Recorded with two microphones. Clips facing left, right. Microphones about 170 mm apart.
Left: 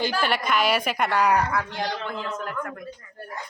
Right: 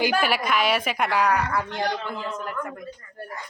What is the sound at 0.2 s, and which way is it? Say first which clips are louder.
A woman's voice: even; 5° right (ahead or behind).